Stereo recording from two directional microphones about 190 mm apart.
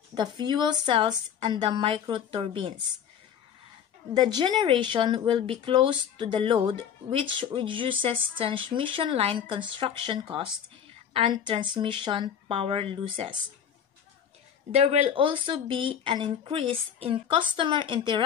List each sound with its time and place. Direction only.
0.1 s speech: 25° right (ahead or behind)
4.1 s speech: 25° right (ahead or behind)
14.7 s speech: 35° right (ahead or behind)